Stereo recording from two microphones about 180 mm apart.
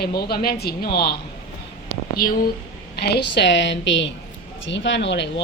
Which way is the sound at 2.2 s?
55° left (ahead or behind).